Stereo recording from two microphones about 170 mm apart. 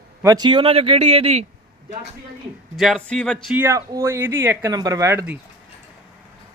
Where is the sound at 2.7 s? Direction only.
Centre (ahead or behind).